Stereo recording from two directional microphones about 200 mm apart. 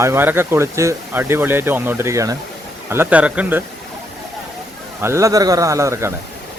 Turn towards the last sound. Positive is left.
turn(degrees=-15)  # may be behind; listen again after turning